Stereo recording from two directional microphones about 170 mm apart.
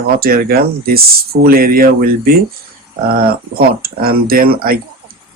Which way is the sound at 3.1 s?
60° right (ahead or behind).